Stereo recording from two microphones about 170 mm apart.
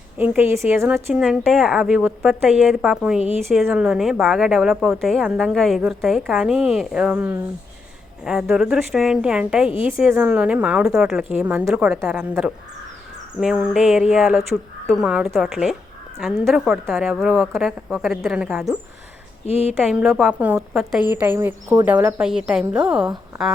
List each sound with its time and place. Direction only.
0.2 s speech: 10° right (ahead or behind)
1.1 s a woman's voice: 5° right (ahead or behind)
19.5 s speech: 35° left (ahead or behind)
19.8 s a woman's voice: 5° right (ahead or behind)
21.1 s speech: 10° right (ahead or behind)